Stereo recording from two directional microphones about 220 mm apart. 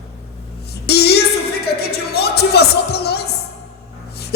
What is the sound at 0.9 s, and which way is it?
Music, 45° left (ahead or behind).